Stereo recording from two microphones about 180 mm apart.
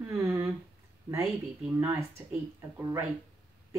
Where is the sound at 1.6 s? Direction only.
15° right (ahead or behind).